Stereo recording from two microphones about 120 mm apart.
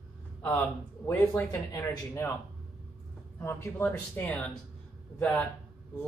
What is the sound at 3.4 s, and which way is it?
Speech, 20° left (ahead or behind).